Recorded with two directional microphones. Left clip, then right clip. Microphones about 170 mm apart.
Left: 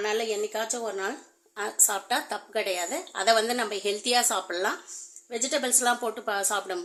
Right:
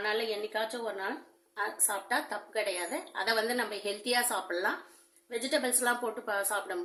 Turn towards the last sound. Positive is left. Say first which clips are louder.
# left 4 dB
turn(degrees=65)  # may be behind; listen again after turning